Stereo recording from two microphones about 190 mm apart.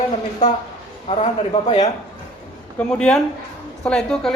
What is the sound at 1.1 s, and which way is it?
Speech, 35° left (ahead or behind).